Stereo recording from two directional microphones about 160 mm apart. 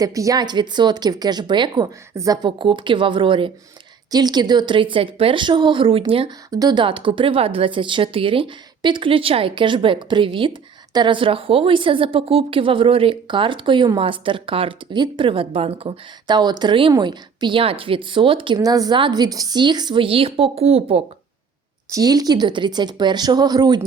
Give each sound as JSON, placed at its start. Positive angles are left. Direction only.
{"t": 0.0, "sound": "speech", "side_deg": -20}
{"t": 21.8, "sound": "speech", "side_deg": -20}